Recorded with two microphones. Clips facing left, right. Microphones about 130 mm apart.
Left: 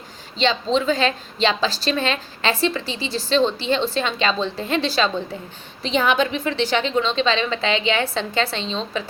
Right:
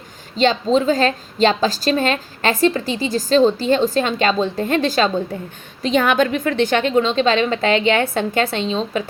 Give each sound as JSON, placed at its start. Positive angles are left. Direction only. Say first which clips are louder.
{"t": 0.3, "sound": "a woman's voice", "louder": "right 4 dB", "side_deg": -45}